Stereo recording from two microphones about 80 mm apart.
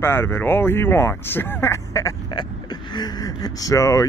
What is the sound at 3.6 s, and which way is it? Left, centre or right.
Speech, left.